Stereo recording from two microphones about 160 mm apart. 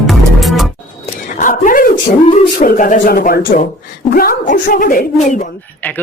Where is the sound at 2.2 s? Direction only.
50° left (ahead or behind).